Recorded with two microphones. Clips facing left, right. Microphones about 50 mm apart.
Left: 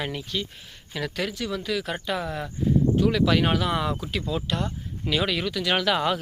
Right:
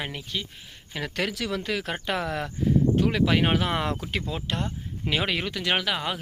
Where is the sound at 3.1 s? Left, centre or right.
Right.